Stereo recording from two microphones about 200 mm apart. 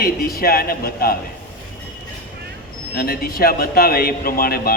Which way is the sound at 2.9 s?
50° left (ahead or behind).